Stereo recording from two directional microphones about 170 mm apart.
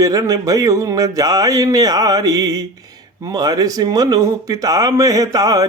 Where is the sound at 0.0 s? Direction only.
20° right (ahead or behind).